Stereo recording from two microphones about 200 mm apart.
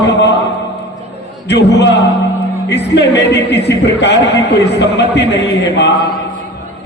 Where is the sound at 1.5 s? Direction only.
60° left (ahead or behind).